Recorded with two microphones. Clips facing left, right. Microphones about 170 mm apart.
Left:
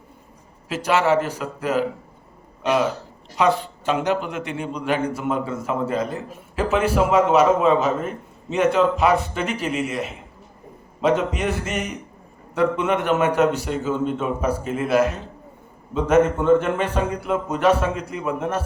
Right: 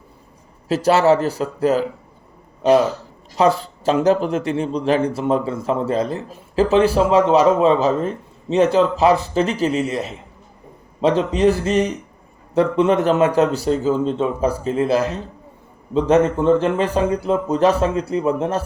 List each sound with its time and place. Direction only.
0.7 s a man's voice: 35° right (ahead or behind)
3.3 s a man's voice: 35° right (ahead or behind)